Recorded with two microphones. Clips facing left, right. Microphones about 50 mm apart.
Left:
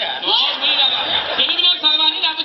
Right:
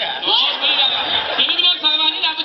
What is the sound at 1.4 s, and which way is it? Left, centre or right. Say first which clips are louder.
Speech: even; right.